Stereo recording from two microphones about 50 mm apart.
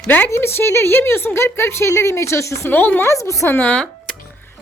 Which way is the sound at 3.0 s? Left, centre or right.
Left.